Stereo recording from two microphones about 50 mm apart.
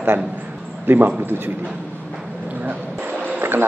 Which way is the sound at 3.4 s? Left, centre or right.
Right.